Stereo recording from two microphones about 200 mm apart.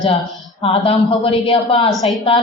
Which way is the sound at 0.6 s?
30° left (ahead or behind).